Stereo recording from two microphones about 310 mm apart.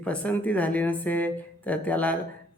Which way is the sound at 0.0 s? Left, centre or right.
Centre.